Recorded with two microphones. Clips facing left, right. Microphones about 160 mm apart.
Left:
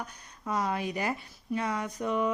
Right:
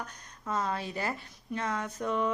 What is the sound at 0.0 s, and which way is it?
Speech, 10° left (ahead or behind).